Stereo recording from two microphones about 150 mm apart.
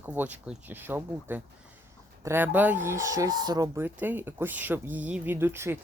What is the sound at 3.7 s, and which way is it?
Speech, 10° right (ahead or behind).